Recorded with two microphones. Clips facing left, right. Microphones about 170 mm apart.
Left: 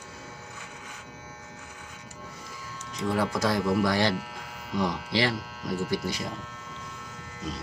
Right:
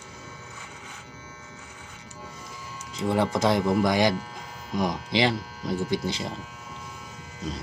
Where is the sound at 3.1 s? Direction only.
25° right (ahead or behind).